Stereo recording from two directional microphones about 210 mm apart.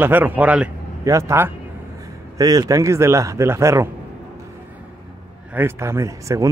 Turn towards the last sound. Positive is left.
turn(degrees=-15)  # may be behind; listen again after turning